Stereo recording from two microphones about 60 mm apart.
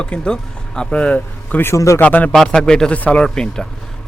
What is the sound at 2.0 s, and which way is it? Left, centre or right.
Speech, left.